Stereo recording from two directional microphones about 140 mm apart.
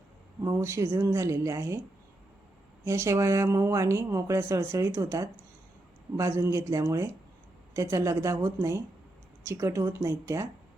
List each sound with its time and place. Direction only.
0.4 s speech: 20° right (ahead or behind)
2.8 s speech: 20° right (ahead or behind)